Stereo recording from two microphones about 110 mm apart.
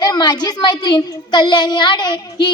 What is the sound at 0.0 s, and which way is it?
A child's voice, 40° left (ahead or behind).